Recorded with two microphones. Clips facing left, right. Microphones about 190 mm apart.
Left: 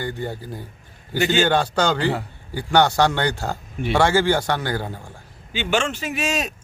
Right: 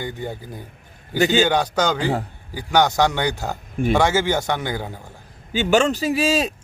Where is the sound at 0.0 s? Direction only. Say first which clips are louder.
Left 1 dB; 15° right (ahead or behind).